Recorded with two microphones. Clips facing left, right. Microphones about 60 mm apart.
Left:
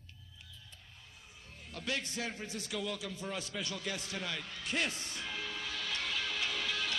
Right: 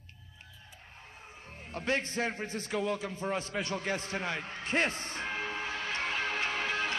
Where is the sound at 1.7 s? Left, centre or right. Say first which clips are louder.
Right 6 dB; right.